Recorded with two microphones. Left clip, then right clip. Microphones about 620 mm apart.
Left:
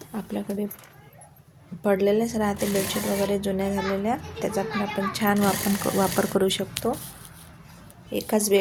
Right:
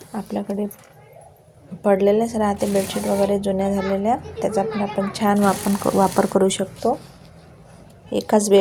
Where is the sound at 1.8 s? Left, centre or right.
Left.